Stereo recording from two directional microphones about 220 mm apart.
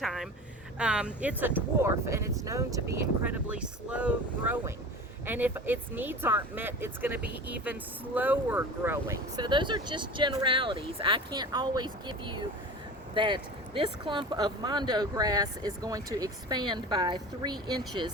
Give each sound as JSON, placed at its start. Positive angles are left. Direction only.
{"t": 0.0, "sound": "speech", "side_deg": 0}